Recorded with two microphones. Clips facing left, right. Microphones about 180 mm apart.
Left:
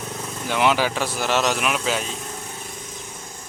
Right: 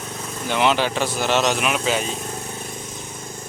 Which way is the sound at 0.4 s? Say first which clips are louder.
Right 1 dB; 5° left (ahead or behind).